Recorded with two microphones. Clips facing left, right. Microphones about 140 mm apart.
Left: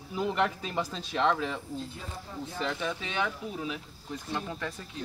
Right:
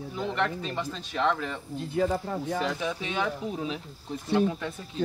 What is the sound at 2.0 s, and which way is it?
Speech, 80° right.